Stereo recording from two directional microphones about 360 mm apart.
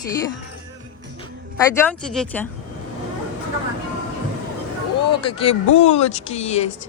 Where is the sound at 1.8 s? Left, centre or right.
Centre.